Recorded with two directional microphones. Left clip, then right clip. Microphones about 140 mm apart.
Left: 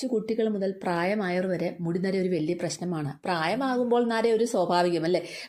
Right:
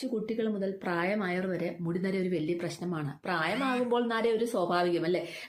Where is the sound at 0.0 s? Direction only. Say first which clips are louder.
Left 5 dB; 40° left (ahead or behind).